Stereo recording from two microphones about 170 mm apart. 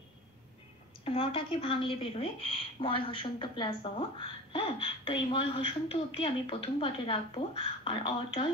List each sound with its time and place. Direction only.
1.0 s speech: 35° left (ahead or behind)